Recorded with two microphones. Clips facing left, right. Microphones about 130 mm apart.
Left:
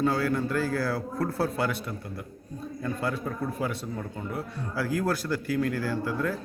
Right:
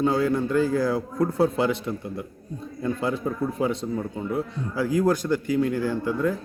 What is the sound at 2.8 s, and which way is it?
A man's voice, 20° right (ahead or behind).